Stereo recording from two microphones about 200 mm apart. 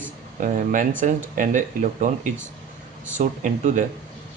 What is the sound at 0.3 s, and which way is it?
Speech, 40° right (ahead or behind).